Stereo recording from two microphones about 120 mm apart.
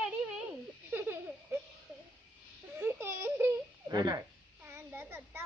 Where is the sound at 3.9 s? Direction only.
35° right (ahead or behind).